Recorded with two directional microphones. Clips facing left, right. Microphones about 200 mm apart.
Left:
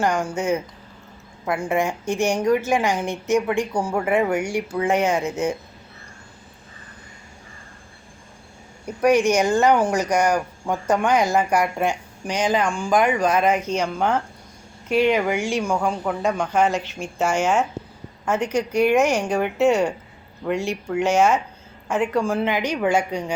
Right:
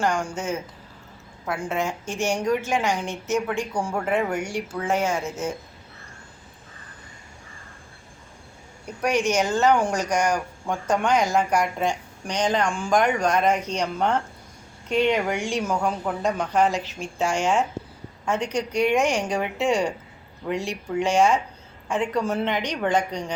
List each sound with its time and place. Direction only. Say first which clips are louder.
0.0 s speech: left 2 dB; 5° left (ahead or behind)
1.5 s speech: left 5 dB; 10° left (ahead or behind)
1.9 s speech: left 6 dB; 60° left (ahead or behind)
2.4 s speech: left 4 dB; 10° left (ahead or behind)
9.0 s speech: left 5 dB; 10° left (ahead or behind)